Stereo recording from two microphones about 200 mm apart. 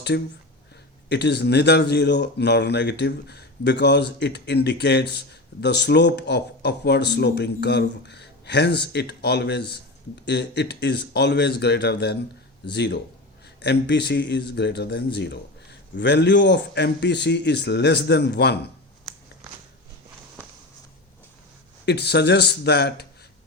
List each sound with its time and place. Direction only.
0.1 s speech: 60° left (ahead or behind)
21.8 s speech: 55° left (ahead or behind)